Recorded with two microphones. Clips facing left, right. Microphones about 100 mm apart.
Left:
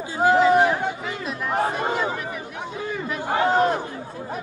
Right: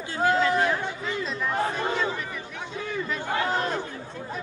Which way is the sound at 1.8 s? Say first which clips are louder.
Left 3 dB; 15° left (ahead or behind).